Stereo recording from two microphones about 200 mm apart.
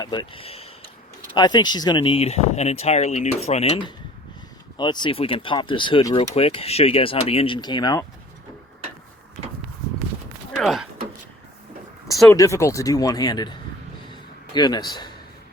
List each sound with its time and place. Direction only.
0.0 s speech: 20° left (ahead or behind)
6.3 s speech: 30° left (ahead or behind)
10.6 s speech: centre (ahead or behind)
12.3 s speech: 15° left (ahead or behind)
14.1 s a sound: 20° left (ahead or behind)